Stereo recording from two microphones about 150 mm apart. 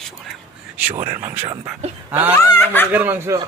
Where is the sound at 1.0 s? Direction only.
15° right (ahead or behind).